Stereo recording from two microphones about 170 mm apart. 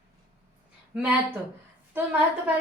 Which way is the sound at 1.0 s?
10° right (ahead or behind).